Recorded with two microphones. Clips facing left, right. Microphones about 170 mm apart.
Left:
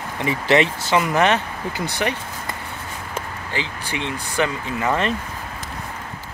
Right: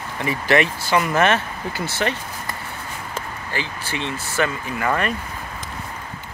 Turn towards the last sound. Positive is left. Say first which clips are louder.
# left 1 dB
turn(degrees=20)  # may be behind; listen again after turning